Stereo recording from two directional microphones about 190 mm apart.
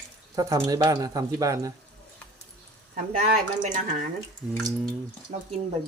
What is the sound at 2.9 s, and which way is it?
Speech, 45° right (ahead or behind).